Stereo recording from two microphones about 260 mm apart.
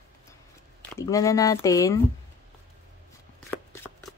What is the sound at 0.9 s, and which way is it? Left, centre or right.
Speech, centre.